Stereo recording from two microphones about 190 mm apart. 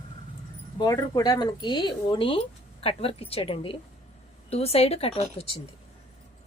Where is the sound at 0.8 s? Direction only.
20° left (ahead or behind).